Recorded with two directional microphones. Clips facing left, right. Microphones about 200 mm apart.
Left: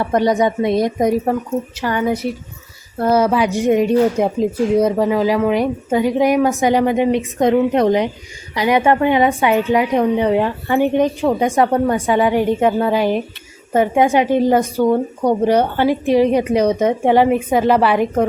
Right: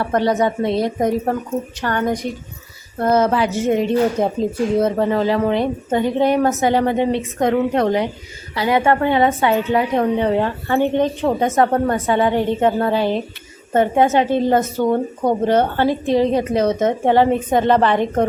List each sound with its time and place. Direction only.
0.0 s a woman's voice: 15° left (ahead or behind)